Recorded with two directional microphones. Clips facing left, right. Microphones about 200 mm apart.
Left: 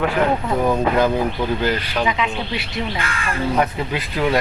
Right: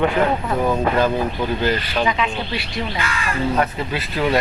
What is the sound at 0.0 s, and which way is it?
Speech, centre (ahead or behind).